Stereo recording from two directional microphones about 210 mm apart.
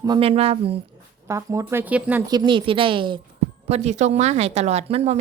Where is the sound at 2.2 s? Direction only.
20° right (ahead or behind).